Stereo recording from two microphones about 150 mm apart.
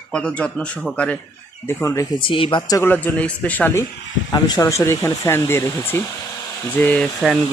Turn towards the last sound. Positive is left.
turn(degrees=0)  # may be behind; listen again after turning